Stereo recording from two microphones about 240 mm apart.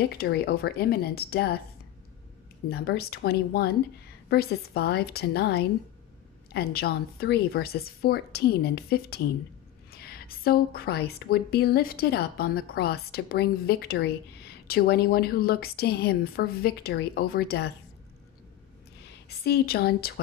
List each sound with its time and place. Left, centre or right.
0.0 s a woman's voice: left
2.7 s a woman's voice: left
19.2 s a woman's voice: left